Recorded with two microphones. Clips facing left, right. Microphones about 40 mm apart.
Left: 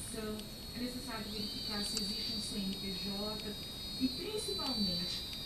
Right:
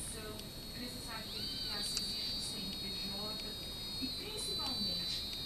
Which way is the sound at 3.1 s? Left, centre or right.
Centre.